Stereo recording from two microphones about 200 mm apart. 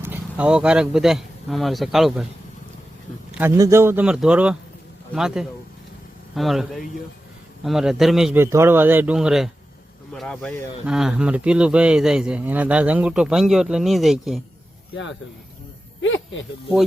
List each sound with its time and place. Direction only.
0.0 s speech: 10° right (ahead or behind)
3.3 s a man's voice: 10° right (ahead or behind)
16.0 s a sound: 70° left (ahead or behind)